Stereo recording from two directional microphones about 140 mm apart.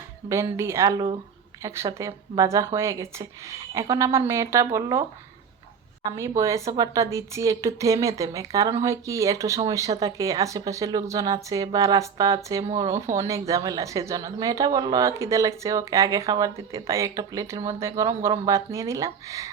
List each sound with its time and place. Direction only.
0.3 s a woman's voice: 20° right (ahead or behind)
6.1 s a woman's voice: 20° right (ahead or behind)
12.6 s speech: 45° right (ahead or behind)
12.9 s a woman's voice: 20° right (ahead or behind)